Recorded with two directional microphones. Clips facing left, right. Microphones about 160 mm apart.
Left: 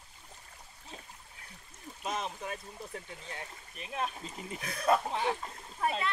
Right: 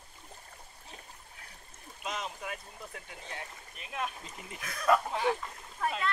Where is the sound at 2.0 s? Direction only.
30° left (ahead or behind).